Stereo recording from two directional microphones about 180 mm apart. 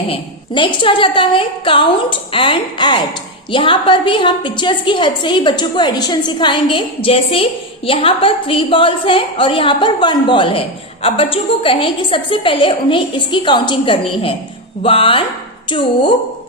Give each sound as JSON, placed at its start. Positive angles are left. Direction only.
{"t": 0.1, "sound": "a woman's voice", "side_deg": 25}